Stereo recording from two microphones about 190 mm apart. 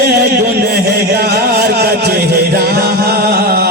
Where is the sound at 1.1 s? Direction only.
60° right (ahead or behind).